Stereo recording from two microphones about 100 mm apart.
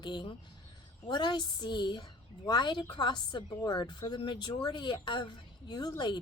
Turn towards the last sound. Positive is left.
turn(degrees=45)  # may be behind; listen again after turning